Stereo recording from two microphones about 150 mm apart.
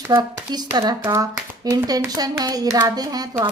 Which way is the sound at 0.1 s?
25° right (ahead or behind).